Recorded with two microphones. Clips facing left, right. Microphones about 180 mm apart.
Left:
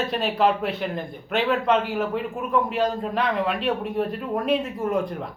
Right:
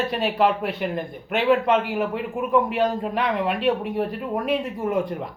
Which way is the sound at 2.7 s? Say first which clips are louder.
Right 1 dB; 15° right (ahead or behind).